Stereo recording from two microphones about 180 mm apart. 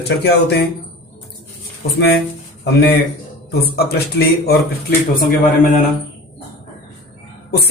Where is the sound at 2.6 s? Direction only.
65° left (ahead or behind).